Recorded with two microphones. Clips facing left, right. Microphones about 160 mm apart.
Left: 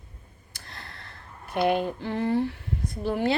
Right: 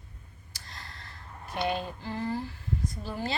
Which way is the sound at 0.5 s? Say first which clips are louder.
Left 3 dB; 60° left (ahead or behind).